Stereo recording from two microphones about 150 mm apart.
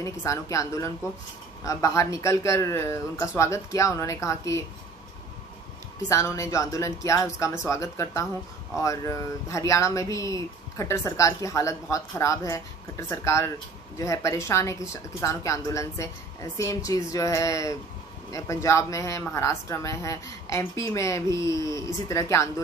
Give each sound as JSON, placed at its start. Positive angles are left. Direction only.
{"t": 0.0, "sound": "speech", "side_deg": 20}
{"t": 6.0, "sound": "speech", "side_deg": 20}